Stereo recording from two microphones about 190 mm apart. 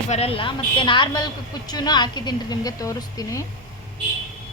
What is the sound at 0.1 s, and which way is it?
Speech, 30° left (ahead or behind).